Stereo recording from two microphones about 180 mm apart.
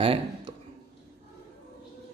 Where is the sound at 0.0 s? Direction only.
30° right (ahead or behind).